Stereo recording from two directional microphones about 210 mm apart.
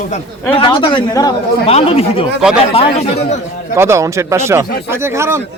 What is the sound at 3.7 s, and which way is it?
Speech, 15° right (ahead or behind).